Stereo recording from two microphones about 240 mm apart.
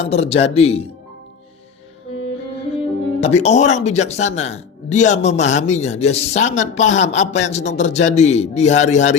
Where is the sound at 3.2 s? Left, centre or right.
Left.